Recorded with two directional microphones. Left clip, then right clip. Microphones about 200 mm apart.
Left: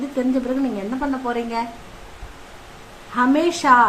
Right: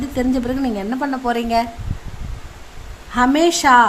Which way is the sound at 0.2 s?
55° right (ahead or behind).